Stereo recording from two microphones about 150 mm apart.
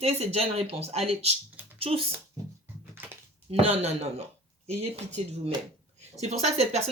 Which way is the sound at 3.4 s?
45° right (ahead or behind).